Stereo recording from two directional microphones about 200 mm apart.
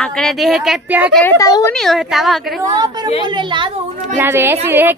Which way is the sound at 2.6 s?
20° right (ahead or behind).